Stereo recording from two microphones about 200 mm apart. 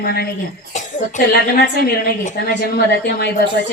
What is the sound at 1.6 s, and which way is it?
A woman's voice, 50° left (ahead or behind).